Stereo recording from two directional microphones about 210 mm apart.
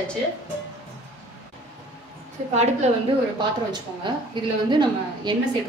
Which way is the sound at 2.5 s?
30° right (ahead or behind).